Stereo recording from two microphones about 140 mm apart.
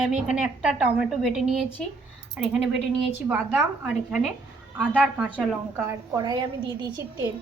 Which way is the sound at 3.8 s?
5° right (ahead or behind).